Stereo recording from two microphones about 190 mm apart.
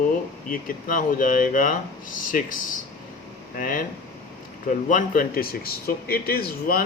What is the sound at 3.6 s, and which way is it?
Speech, 45° left (ahead or behind).